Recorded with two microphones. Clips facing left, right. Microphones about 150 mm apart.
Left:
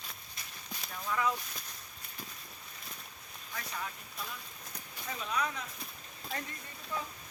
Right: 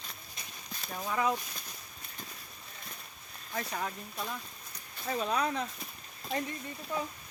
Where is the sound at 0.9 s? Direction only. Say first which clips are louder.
Right 2 dB; 30° right (ahead or behind).